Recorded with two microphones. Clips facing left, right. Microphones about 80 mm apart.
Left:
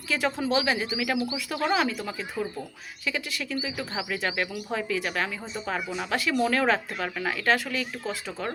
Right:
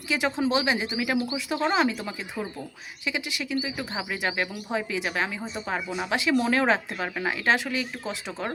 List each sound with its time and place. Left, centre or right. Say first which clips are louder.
0.1 s speech: right 1 dB; centre